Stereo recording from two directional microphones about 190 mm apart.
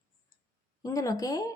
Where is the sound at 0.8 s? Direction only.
20° left (ahead or behind).